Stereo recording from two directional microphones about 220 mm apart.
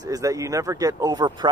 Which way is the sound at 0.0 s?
15° right (ahead or behind).